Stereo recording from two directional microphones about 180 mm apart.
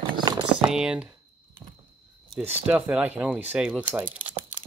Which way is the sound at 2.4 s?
10° right (ahead or behind).